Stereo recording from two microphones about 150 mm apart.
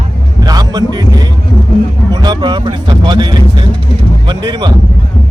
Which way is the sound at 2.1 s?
30° right (ahead or behind).